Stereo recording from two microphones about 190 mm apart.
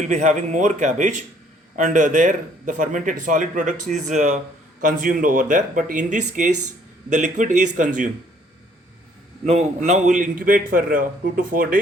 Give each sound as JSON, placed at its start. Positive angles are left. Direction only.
{"t": 0.0, "sound": "a man's voice", "side_deg": -40}
{"t": 9.4, "sound": "a man's voice", "side_deg": -35}